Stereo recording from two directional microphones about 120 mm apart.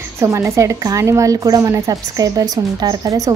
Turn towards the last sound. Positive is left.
turn(degrees=-30)  # may be behind; listen again after turning